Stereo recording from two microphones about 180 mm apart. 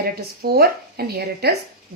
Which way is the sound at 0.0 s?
60° right (ahead or behind).